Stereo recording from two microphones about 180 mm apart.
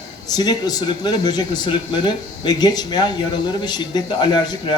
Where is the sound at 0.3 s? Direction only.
20° left (ahead or behind).